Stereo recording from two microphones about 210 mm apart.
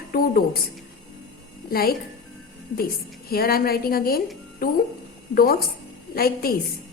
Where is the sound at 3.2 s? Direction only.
45° left (ahead or behind).